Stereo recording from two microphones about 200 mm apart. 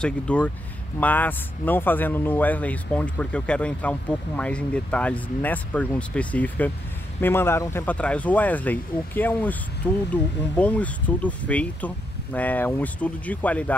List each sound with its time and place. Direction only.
0.0 s speech: 5° left (ahead or behind)